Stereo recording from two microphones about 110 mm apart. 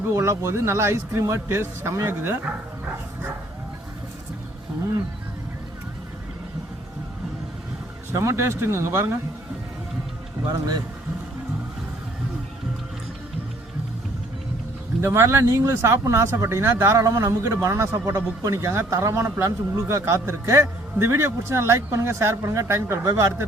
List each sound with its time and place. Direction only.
0.1 s speech: 25° right (ahead or behind)
8.1 s speech: 25° right (ahead or behind)
15.0 s speech: 25° right (ahead or behind)